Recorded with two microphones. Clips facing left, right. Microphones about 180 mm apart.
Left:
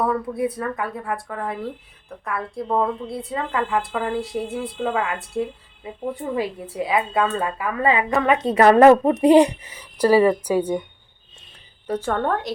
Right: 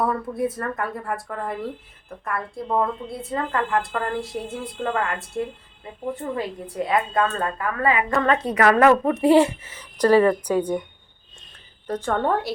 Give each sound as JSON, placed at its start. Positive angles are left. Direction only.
{"t": 0.0, "sound": "speech", "side_deg": 0}
{"t": 5.8, "sound": "a woman's voice", "side_deg": 10}
{"t": 8.4, "sound": "a woman's voice", "side_deg": 25}
{"t": 11.9, "sound": "a woman's voice", "side_deg": 10}
{"t": 12.1, "sound": "speech", "side_deg": -5}